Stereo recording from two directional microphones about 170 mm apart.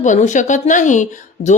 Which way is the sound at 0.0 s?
45° left (ahead or behind).